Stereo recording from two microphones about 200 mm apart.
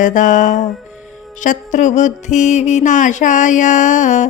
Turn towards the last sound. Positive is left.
turn(degrees=35)  # may be behind; listen again after turning